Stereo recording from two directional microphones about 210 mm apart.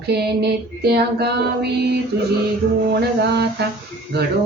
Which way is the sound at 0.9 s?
50° right (ahead or behind).